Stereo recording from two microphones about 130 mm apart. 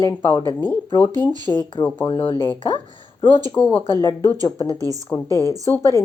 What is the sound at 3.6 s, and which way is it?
Speech, 10° left (ahead or behind).